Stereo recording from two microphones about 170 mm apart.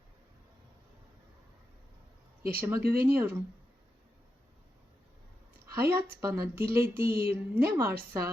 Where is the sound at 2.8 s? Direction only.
65° right (ahead or behind).